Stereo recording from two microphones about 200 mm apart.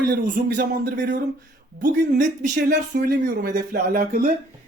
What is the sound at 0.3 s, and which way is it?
Speech, 40° right (ahead or behind).